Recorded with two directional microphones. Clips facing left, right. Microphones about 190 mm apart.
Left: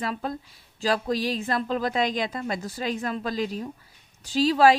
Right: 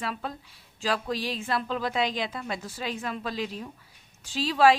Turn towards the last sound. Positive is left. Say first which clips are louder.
# left 3 dB
turn(degrees=40)  # may be behind; listen again after turning